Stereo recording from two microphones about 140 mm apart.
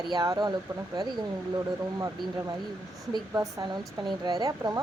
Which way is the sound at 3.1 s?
25° right (ahead or behind).